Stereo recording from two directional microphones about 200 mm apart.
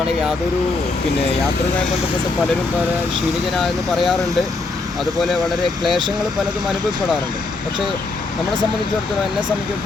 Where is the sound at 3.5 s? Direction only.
Centre (ahead or behind).